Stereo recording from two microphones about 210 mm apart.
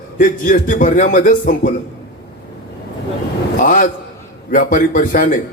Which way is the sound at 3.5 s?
40° left (ahead or behind).